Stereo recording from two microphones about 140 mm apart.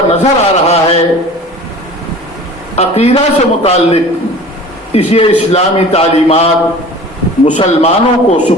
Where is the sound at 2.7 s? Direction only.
50° left (ahead or behind).